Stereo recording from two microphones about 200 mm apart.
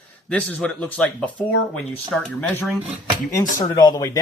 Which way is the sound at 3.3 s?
20° left (ahead or behind).